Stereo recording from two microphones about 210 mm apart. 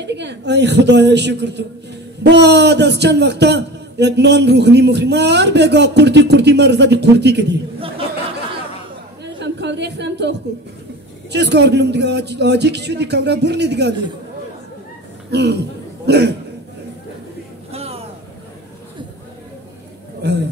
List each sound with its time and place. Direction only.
0.0 s a man's voice: 55° right (ahead or behind)
9.4 s a sound: 55° right (ahead or behind)
11.3 s a man's voice: 55° right (ahead or behind)
15.3 s a man's voice: 55° right (ahead or behind)
17.6 s a sound: 30° right (ahead or behind)
20.2 s a man's voice: 55° right (ahead or behind)